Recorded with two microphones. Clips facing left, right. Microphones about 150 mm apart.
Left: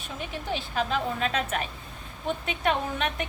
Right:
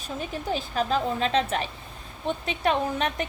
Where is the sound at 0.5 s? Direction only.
35° right (ahead or behind).